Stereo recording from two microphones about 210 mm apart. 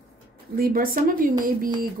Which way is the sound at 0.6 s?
40° right (ahead or behind).